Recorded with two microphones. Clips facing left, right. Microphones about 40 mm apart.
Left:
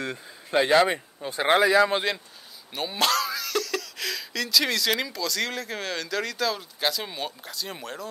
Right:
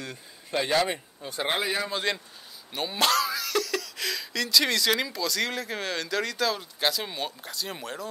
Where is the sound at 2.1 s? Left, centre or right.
Centre.